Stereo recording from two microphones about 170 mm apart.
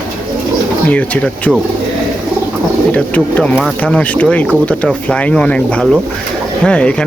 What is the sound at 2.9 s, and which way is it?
Speech, 5° left (ahead or behind).